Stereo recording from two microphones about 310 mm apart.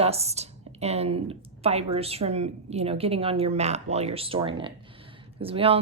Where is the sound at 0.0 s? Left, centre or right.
Centre.